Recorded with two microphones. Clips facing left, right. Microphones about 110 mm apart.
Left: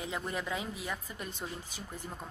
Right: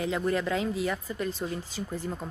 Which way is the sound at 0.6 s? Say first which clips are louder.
Right 9 dB; 90° right.